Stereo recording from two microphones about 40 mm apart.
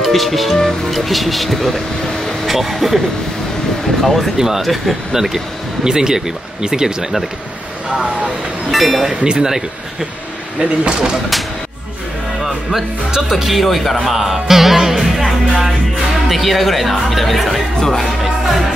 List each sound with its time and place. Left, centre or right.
0.0 s speech: centre
4.0 s speech: centre
4.4 s speech: centre
8.7 s speech: centre
9.2 s speech: centre
10.6 s speech: right
13.3 s speech: centre